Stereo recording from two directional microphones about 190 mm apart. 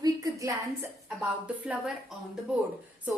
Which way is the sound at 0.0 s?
15° right (ahead or behind).